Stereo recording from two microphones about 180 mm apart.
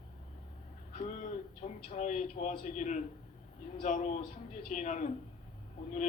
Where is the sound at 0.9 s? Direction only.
45° left (ahead or behind).